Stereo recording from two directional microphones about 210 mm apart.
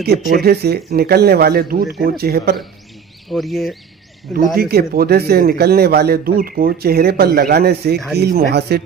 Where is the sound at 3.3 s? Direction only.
Centre (ahead or behind).